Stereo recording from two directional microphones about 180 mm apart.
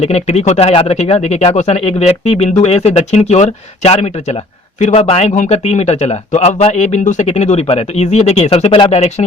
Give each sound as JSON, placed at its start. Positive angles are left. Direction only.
{"t": 0.0, "sound": "a man's voice", "side_deg": 35}